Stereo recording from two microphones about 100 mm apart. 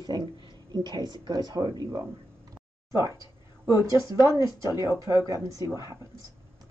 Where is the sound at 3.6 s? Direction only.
35° right (ahead or behind).